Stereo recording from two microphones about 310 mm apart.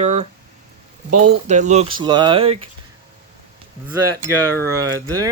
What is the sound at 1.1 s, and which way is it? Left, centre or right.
Speech, right.